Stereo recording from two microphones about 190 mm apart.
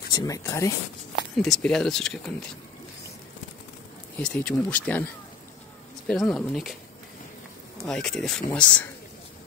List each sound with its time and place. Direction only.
0.1 s speech: 20° left (ahead or behind)
1.3 s speech: centre (ahead or behind)
4.2 s speech: 5° left (ahead or behind)
6.0 s speech: 5° left (ahead or behind)
7.8 s speech: 5° left (ahead or behind)